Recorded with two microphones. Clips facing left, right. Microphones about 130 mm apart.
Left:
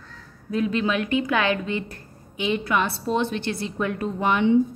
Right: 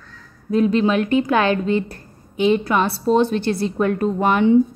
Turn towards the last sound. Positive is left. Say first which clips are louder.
# right 4 dB
turn(degrees=-45)  # may be behind; listen again after turning